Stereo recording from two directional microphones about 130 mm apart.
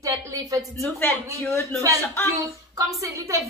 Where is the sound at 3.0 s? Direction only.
25° right (ahead or behind).